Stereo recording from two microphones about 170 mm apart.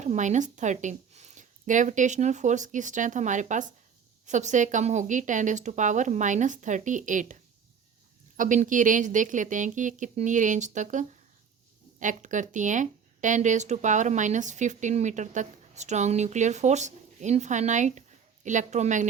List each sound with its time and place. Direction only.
0.0 s speech: 45° right (ahead or behind)
8.4 s speech: 50° right (ahead or behind)